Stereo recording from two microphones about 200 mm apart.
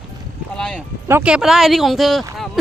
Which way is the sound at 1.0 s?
10° right (ahead or behind).